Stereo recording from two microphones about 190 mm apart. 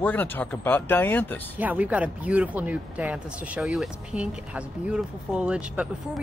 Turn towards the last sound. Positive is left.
turn(degrees=-5)  # may be behind; listen again after turning